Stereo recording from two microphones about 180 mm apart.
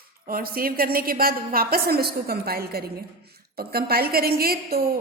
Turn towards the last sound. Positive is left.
turn(degrees=-55)  # may be behind; listen again after turning